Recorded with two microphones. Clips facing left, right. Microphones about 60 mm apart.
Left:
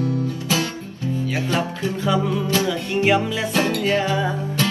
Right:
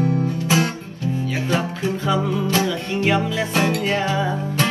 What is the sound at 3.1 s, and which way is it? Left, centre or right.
Music, centre.